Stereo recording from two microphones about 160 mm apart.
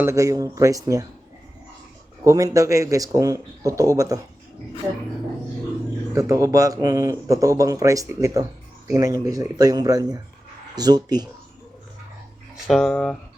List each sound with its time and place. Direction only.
0.0 s speech: 20° right (ahead or behind)
2.2 s speech: 20° right (ahead or behind)
6.1 s speech: 20° right (ahead or behind)
12.6 s speech: 5° left (ahead or behind)